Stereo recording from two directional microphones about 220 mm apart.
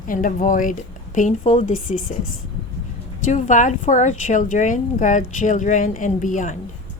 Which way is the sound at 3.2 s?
35° left (ahead or behind).